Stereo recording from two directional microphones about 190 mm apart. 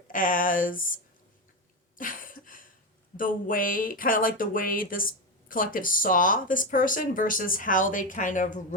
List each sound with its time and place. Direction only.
0.1 s speech: 45° left (ahead or behind)
2.0 s a sound: 45° left (ahead or behind)
3.2 s speech: 45° left (ahead or behind)